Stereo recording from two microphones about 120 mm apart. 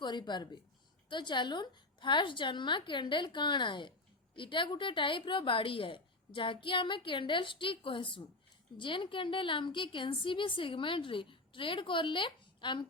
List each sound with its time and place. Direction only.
0.0 s a woman's voice: 40° left (ahead or behind)